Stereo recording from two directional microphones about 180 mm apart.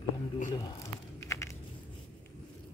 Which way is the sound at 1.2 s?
15° left (ahead or behind).